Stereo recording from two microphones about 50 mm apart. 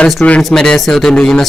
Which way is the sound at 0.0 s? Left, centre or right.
Left.